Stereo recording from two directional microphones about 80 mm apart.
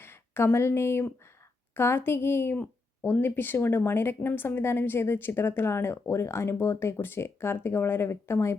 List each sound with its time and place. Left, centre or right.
0.0 s a woman's voice: left